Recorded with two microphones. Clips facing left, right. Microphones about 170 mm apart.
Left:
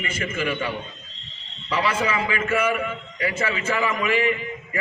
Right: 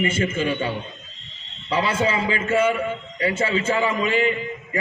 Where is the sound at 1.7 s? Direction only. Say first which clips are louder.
Right 2 dB; 30° right (ahead or behind).